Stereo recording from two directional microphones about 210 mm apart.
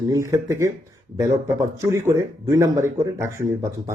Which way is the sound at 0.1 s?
15° right (ahead or behind).